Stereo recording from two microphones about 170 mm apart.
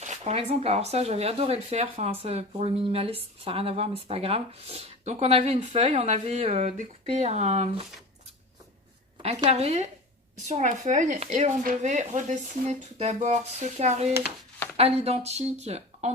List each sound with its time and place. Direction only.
0.0 s speech: 40° right (ahead or behind)
9.5 s speech: 40° right (ahead or behind)